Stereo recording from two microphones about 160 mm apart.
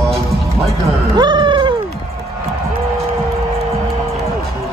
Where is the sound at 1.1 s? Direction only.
30° right (ahead or behind).